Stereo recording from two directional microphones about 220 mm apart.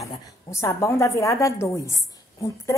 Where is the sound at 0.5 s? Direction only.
10° left (ahead or behind).